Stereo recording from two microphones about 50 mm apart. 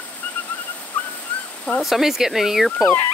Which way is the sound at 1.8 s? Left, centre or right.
Centre.